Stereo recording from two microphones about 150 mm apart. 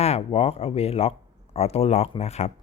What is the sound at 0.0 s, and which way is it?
A man's voice, 45° left (ahead or behind).